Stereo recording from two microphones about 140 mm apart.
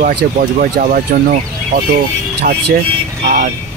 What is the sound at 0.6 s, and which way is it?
Speech, 90° right.